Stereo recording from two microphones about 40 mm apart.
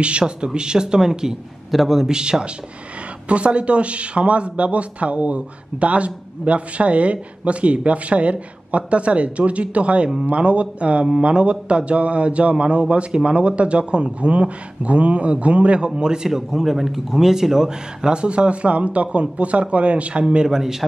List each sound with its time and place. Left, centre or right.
0.0 s a man's voice: right
3.3 s speech: right
16.3 s speech: centre; by 20.4 s right
20.4 s a man's voice: centre